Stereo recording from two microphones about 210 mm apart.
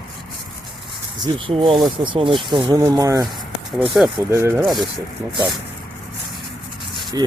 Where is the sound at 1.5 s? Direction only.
25° right (ahead or behind).